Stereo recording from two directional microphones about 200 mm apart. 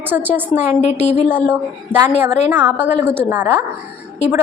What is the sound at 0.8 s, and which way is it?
Speech, 30° left (ahead or behind).